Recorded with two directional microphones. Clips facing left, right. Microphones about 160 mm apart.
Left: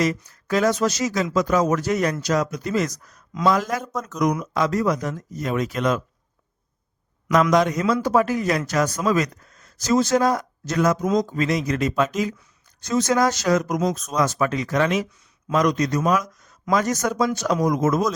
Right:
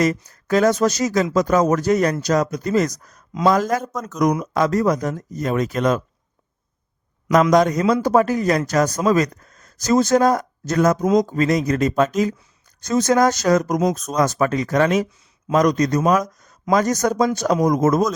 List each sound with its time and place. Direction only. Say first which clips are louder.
0.0 s speech: right 3 dB; 45° right (ahead or behind)
7.5 s speech: right 3 dB; 40° right (ahead or behind)